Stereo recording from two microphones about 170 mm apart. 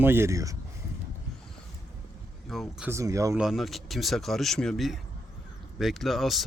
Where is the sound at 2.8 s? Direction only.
15° right (ahead or behind).